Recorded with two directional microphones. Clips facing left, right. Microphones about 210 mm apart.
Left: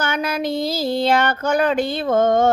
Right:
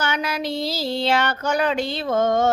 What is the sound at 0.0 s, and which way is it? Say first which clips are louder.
Child singing: left 3 dB; 50° left (ahead or behind).